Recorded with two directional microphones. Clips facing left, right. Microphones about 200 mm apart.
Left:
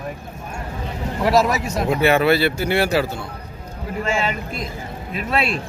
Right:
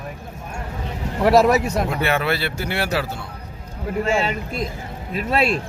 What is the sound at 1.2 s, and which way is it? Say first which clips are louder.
Speech: right 3 dB; 60° right (ahead or behind).